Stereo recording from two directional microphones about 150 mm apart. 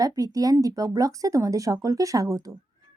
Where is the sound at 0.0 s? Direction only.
25° right (ahead or behind).